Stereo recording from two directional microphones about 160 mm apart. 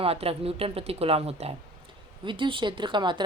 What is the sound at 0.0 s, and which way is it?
Speech, 35° right (ahead or behind).